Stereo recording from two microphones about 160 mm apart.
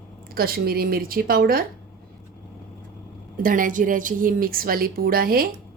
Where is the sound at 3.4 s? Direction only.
55° right (ahead or behind).